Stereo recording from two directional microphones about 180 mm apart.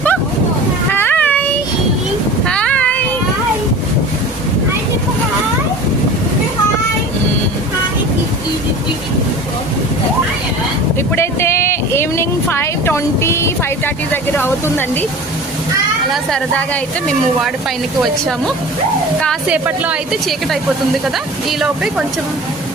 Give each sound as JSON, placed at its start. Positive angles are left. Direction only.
{"t": 0.9, "sound": "a sound", "side_deg": 10}
{"t": 2.5, "sound": "child singing", "side_deg": 5}
{"t": 11.1, "sound": "vehicle", "side_deg": 15}
{"t": 16.1, "sound": "a woman's voice", "side_deg": 5}
{"t": 18.0, "sound": "a woman's voice", "side_deg": 0}
{"t": 19.5, "sound": "speech", "side_deg": -10}